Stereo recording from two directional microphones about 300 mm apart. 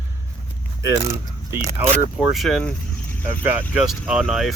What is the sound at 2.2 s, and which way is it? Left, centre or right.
Speech, centre.